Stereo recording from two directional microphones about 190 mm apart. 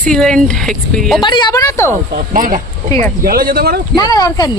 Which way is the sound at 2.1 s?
45° right (ahead or behind).